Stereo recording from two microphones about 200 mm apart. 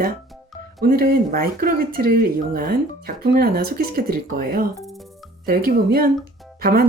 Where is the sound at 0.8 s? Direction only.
45° right (ahead or behind).